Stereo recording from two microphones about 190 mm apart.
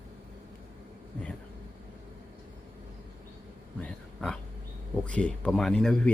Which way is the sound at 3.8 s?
5° left (ahead or behind).